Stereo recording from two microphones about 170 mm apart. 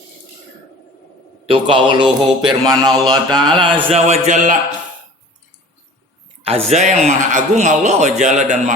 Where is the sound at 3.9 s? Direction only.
40° right (ahead or behind).